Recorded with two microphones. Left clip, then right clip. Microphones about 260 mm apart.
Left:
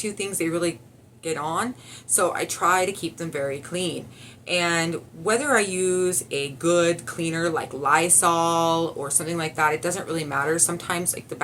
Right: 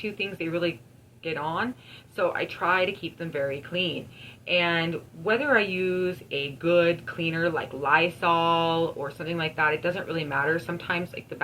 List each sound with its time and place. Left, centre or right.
0.2 s speech: left
9.0 s speech: centre
9.2 s speech: left